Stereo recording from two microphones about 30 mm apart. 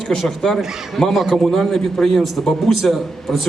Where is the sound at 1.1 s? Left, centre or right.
Centre.